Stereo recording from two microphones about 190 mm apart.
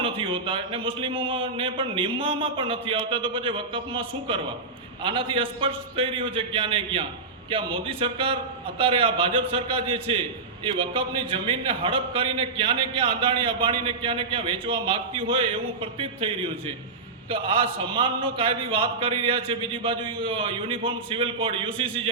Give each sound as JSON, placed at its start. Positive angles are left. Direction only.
{"t": 0.0, "sound": "a man's voice", "side_deg": -25}